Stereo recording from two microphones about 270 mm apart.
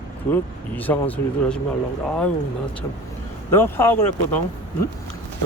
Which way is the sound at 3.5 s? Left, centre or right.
Centre.